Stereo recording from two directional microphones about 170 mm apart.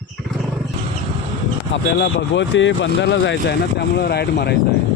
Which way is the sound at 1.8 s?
75° left (ahead or behind).